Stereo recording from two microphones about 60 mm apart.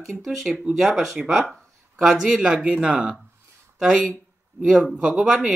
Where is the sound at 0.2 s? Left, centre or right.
Centre.